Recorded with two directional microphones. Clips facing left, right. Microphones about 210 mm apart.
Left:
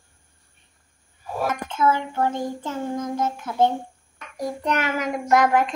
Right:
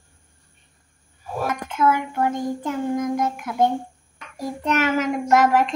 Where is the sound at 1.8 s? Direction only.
25° left (ahead or behind).